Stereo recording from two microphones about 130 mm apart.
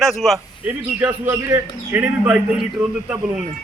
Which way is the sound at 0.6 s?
15° right (ahead or behind).